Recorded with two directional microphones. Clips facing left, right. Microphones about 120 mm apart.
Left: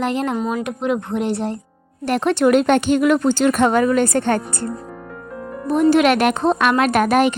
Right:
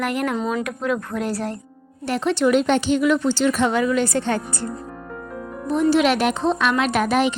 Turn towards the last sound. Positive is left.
turn(degrees=50)  # may be behind; listen again after turning